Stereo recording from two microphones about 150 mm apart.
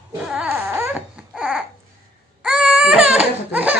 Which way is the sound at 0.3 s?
5° right (ahead or behind).